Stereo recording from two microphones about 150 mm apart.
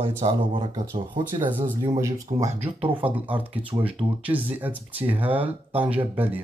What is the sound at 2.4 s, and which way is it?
Speech, 40° right (ahead or behind).